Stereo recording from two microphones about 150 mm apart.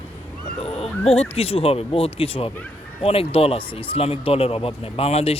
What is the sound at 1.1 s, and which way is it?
Speech, 40° left (ahead or behind).